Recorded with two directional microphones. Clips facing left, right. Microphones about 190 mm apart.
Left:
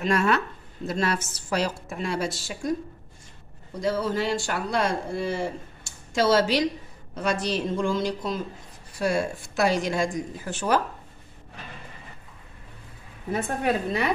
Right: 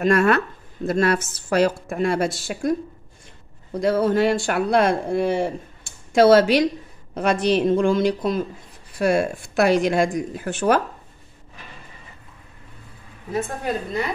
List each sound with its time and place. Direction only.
0.0 s speech: 55° right (ahead or behind)
3.8 s speech: 60° right (ahead or behind)
13.3 s a woman's voice: 65° left (ahead or behind)